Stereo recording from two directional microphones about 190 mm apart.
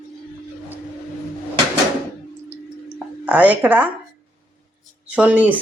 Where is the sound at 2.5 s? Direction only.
5° right (ahead or behind).